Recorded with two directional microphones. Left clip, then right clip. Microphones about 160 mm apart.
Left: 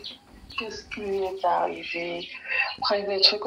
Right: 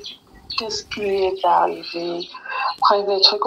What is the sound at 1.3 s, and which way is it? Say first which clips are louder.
Speech: right 7 dB; 40° right (ahead or behind).